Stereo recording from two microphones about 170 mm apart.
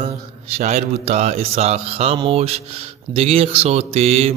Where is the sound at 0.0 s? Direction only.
40° right (ahead or behind).